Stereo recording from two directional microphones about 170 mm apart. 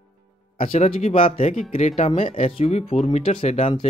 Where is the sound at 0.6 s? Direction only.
40° left (ahead or behind).